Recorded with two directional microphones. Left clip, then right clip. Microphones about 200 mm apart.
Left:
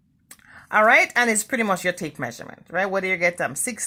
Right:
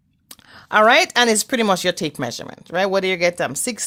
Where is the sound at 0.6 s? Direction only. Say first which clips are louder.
Right 3 dB; 60° right (ahead or behind).